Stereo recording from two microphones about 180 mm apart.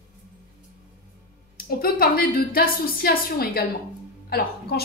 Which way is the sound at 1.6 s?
55° left (ahead or behind).